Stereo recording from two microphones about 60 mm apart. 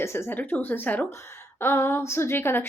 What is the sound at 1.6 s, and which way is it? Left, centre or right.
Speech, left.